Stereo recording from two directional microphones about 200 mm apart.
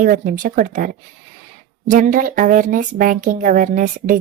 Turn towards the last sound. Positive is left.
turn(degrees=-40)  # may be behind; listen again after turning